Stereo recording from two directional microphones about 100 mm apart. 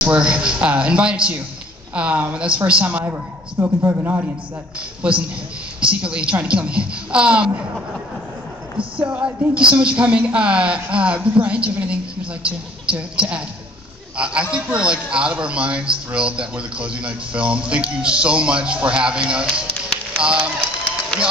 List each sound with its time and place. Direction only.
0.0 s a man's voice: 10° right (ahead or behind)
5.0 s a man's voice: 10° right (ahead or behind)
8.7 s a man's voice: 15° right (ahead or behind)